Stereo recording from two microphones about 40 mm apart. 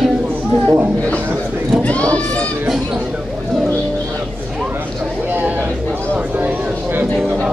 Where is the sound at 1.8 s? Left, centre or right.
Left.